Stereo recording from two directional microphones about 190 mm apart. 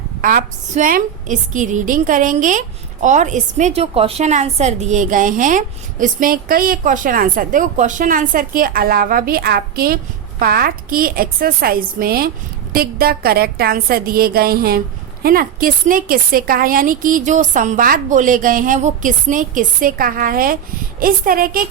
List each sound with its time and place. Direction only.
0.2 s a woman's voice: 45° right (ahead or behind)